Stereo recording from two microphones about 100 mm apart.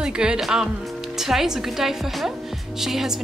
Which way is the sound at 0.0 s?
5° right (ahead or behind).